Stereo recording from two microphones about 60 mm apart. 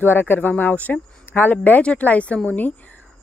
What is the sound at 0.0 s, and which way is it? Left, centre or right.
A woman's voice, left.